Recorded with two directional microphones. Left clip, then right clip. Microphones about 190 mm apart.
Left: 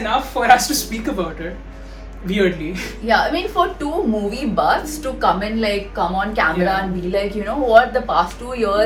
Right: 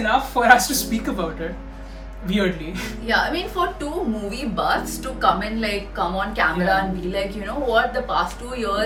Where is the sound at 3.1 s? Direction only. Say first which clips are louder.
Left 4 dB; 5° left (ahead or behind).